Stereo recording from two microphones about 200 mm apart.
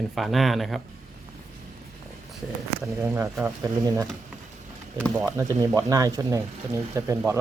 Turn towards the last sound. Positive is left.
turn(degrees=-15)  # may be behind; listen again after turning